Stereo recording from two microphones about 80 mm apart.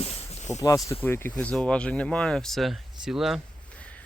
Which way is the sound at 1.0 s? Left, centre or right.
Left.